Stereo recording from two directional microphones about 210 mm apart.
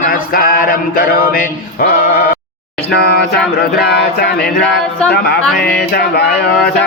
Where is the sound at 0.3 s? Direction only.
45° left (ahead or behind).